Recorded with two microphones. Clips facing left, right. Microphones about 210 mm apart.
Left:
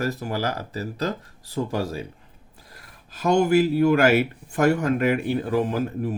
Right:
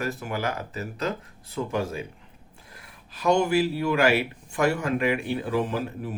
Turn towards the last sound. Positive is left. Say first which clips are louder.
# left 5 dB
turn(degrees=45)  # may be behind; listen again after turning